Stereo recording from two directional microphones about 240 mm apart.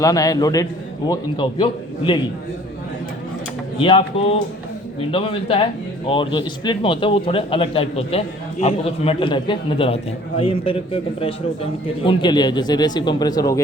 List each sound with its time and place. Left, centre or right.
0.0 s a man's voice: centre
3.8 s a man's voice: left